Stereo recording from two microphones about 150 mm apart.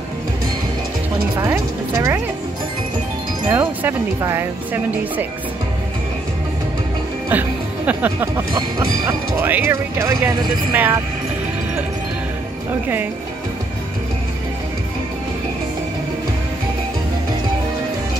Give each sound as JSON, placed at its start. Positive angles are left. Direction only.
{"t": 1.5, "sound": "a woman's voice", "side_deg": -20}
{"t": 3.4, "sound": "speech", "side_deg": -20}
{"t": 7.2, "sound": "speech", "side_deg": -10}
{"t": 8.5, "sound": "a woman's voice", "side_deg": -25}
{"t": 9.4, "sound": "speech", "side_deg": -15}